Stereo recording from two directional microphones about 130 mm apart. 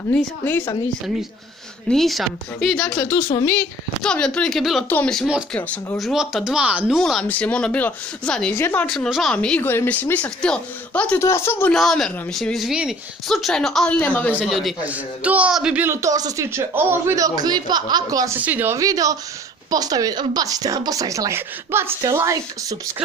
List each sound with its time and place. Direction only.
0.1 s speech: 15° left (ahead or behind)
1.9 s a woman's voice: centre (ahead or behind)
4.0 s a woman's voice: 5° left (ahead or behind)
5.9 s a woman's voice: centre (ahead or behind)
7.0 s a woman's voice: centre (ahead or behind)
8.5 s speech: 20° left (ahead or behind)
8.8 s a woman's voice: 5° left (ahead or behind)
9.6 s speech: 15° left (ahead or behind)
11.1 s speech: 20° left (ahead or behind)
11.7 s a woman's voice: centre (ahead or behind)
14.4 s a woman's voice: centre (ahead or behind)
14.9 s speech: 10° right (ahead or behind); by 18.3 s 30° right (ahead or behind)
18.4 s speech: 15° right (ahead or behind)
18.8 s speech: 25° right (ahead or behind)